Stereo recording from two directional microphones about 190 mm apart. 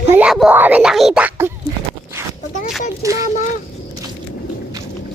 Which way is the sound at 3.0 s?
15° right (ahead or behind).